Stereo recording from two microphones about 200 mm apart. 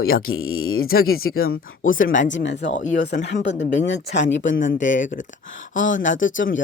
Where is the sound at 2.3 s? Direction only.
65° left (ahead or behind).